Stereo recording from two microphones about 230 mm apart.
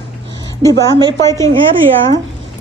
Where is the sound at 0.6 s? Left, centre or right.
Centre.